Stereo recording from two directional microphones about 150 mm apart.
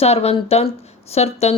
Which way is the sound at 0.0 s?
45° left (ahead or behind).